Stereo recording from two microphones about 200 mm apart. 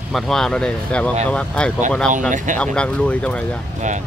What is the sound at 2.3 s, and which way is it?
Speech, 40° right (ahead or behind).